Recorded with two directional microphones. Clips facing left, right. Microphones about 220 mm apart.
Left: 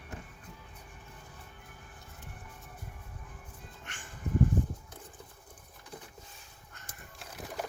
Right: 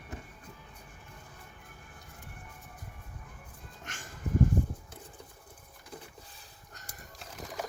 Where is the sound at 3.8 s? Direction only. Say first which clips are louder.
Right 6 dB; 40° right (ahead or behind).